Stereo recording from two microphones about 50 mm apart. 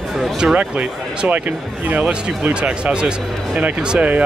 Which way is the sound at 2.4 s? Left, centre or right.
Right.